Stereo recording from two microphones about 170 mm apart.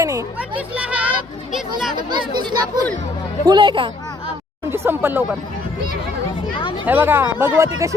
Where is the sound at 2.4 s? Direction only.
25° right (ahead or behind).